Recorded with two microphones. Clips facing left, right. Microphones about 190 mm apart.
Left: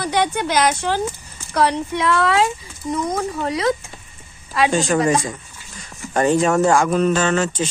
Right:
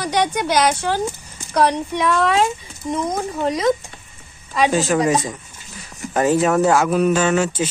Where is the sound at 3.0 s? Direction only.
Centre (ahead or behind).